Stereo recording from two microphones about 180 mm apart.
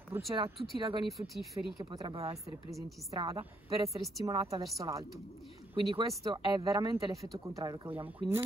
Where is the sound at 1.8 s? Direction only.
25° right (ahead or behind).